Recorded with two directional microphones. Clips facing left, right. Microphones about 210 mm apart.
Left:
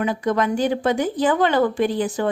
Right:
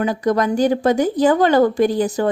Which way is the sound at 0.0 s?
40° right (ahead or behind).